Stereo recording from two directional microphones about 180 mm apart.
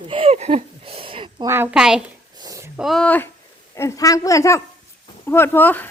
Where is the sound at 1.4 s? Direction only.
10° right (ahead or behind).